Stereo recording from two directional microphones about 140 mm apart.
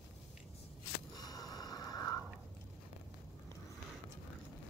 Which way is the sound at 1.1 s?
30° left (ahead or behind).